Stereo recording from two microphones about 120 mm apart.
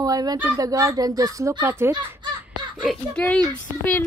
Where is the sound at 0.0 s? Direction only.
30° right (ahead or behind).